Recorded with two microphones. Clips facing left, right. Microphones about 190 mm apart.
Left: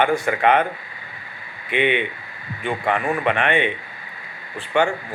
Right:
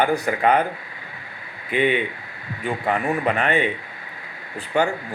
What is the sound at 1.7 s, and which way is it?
Speech, 40° right (ahead or behind).